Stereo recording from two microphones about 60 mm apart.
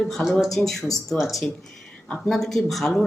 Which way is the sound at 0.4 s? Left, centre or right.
Centre.